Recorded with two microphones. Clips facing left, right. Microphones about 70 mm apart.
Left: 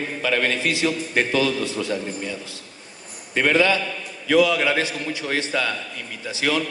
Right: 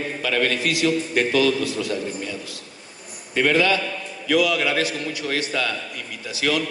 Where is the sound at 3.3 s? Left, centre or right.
Left.